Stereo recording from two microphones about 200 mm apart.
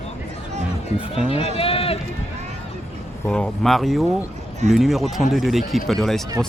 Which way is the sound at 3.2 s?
5° left (ahead or behind).